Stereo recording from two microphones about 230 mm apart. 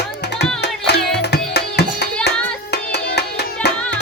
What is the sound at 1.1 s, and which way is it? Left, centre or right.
Music, left.